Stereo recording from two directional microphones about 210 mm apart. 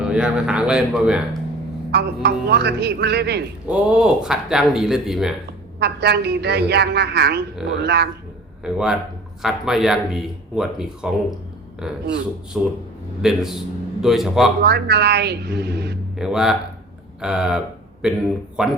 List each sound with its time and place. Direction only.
0.0 s speech: 5° right (ahead or behind)
1.9 s a woman's voice: 50° right (ahead or behind)
3.7 s speech: 5° right (ahead or behind)
5.8 s a woman's voice: 50° right (ahead or behind)
8.6 s speech: 5° right (ahead or behind)
14.6 s a woman's voice: 50° right (ahead or behind)
16.1 s speech: centre (ahead or behind)